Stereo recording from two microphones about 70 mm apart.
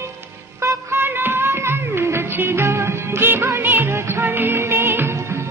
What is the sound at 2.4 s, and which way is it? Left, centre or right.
Music of bollywood, right.